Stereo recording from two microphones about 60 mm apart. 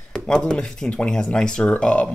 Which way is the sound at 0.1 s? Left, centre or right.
Centre.